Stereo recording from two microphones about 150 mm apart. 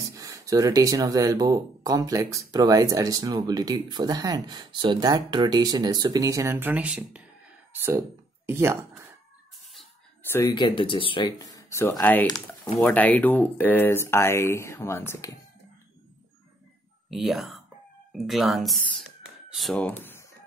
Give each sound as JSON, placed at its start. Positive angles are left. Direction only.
{"t": 0.0, "sound": "speech", "side_deg": -20}
{"t": 10.2, "sound": "speech", "side_deg": 15}
{"t": 10.5, "sound": "speech", "side_deg": 30}
{"t": 11.3, "sound": "speech", "side_deg": 25}
{"t": 17.1, "sound": "speech", "side_deg": 0}
{"t": 19.9, "sound": "a sound", "side_deg": 15}